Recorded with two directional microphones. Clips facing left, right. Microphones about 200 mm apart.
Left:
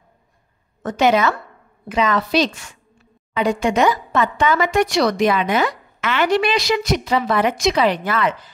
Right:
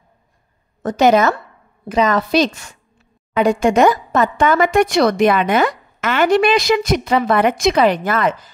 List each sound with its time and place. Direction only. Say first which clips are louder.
0.8 s a woman's voice: right 3 dB; 40° right (ahead or behind)